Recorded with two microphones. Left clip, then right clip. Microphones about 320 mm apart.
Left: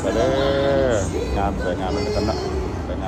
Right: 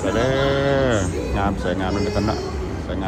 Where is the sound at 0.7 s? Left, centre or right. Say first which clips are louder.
Even; right.